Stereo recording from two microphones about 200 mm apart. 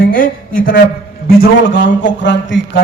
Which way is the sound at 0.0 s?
45° left (ahead or behind).